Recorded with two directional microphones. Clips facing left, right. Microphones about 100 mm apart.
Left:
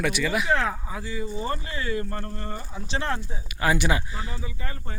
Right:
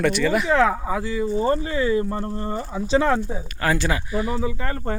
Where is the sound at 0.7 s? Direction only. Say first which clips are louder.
Right 9 dB; 65° right (ahead or behind); by 1.3 s 90° right.